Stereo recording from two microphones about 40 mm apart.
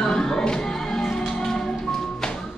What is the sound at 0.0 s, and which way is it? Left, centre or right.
Music, centre.